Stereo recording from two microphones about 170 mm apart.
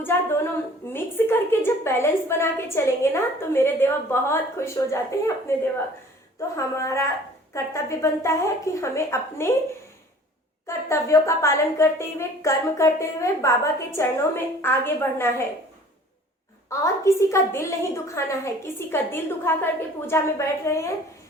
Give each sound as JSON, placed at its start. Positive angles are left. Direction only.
{"t": 0.0, "sound": "a woman's voice", "side_deg": 15}
{"t": 6.6, "sound": "a woman's voice", "side_deg": 20}
{"t": 10.7, "sound": "a woman's voice", "side_deg": 15}
{"t": 16.6, "sound": "a woman's voice", "side_deg": 15}